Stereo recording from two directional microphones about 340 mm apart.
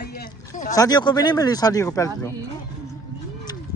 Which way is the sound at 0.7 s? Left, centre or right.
Centre.